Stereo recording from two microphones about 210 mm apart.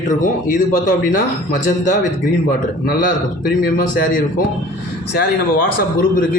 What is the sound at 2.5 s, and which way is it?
Speech, 45° left (ahead or behind).